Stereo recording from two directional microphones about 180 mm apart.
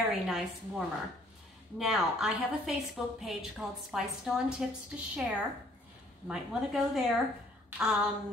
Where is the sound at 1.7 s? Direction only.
Centre (ahead or behind).